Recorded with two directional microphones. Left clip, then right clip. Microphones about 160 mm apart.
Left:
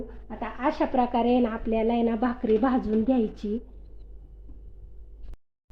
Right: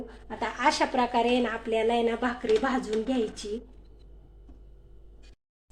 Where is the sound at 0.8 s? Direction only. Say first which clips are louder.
Left 1 dB; 30° left (ahead or behind).